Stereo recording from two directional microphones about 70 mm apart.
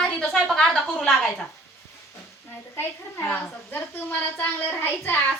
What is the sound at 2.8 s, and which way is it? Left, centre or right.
A woman's voice, left.